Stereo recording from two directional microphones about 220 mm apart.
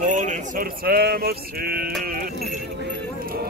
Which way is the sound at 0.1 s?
35° right (ahead or behind).